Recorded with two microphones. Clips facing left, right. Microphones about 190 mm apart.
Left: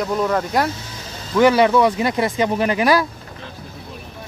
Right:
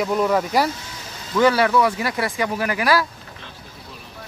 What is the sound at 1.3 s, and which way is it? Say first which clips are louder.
Speech: left 3 dB; 15° left (ahead or behind).